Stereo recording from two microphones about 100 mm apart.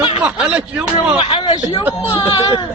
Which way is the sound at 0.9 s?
60° left (ahead or behind).